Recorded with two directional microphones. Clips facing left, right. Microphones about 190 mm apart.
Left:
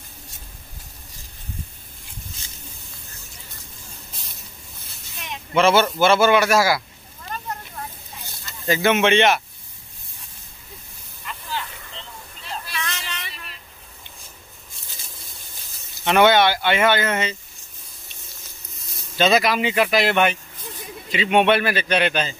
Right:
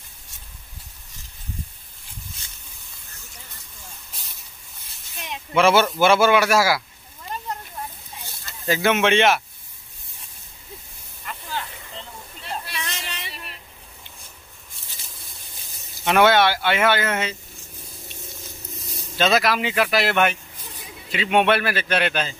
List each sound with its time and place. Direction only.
5.5 s a man's voice: 10° right (ahead or behind)
8.6 s speech: 5° right (ahead or behind)
12.8 s a sound: 30° right (ahead or behind)
16.0 s speech: 5° right (ahead or behind)
19.1 s speech: centre (ahead or behind)